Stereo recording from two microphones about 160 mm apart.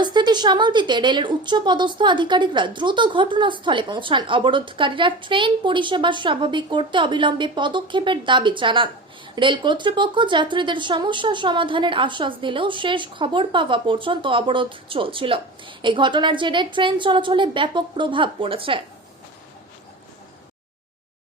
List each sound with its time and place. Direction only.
0.0 s a woman's voice: 25° right (ahead or behind)